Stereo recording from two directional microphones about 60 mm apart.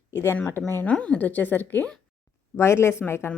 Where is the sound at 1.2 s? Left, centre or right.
Left.